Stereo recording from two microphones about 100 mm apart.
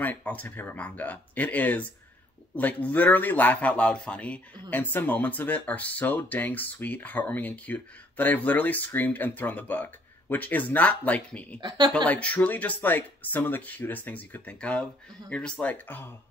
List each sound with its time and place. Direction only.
0.0 s speech: 15° left (ahead or behind)
11.6 s speech: 50° right (ahead or behind)
11.9 s speech: 10° left (ahead or behind)